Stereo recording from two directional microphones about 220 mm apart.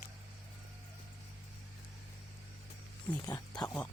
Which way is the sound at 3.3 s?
20° left (ahead or behind).